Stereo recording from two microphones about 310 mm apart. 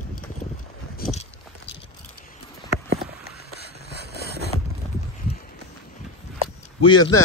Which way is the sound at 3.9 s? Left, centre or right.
Left.